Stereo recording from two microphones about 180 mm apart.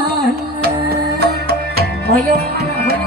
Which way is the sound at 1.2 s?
60° right (ahead or behind).